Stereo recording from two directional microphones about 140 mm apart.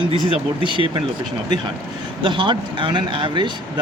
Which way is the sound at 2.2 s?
35° right (ahead or behind).